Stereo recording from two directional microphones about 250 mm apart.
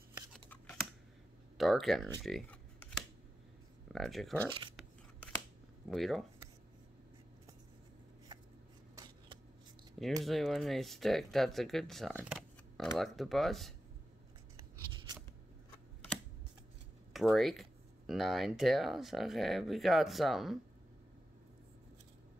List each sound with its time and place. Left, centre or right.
1.6 s speech: centre
2.2 s a sound: centre
3.9 s speech: centre
5.9 s speech: centre
8.9 s shuffling cards: centre
10.2 s speech: centre
14.6 s a sound: centre
17.1 s speech: centre